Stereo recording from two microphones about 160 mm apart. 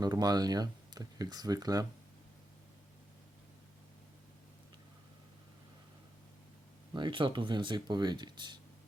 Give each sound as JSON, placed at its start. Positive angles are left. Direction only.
{"t": 0.0, "sound": "speech", "side_deg": -25}
{"t": 6.9, "sound": "speech", "side_deg": -30}